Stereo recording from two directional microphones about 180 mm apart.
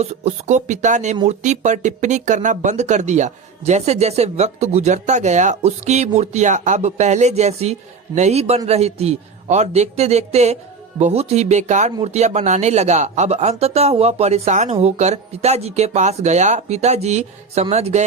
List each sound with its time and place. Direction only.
0.0 s speech: 40° right (ahead or behind)